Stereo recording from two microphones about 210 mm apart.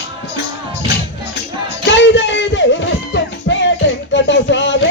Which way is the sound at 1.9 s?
60° left (ahead or behind).